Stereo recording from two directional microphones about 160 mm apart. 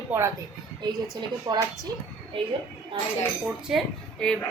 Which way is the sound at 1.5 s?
25° right (ahead or behind).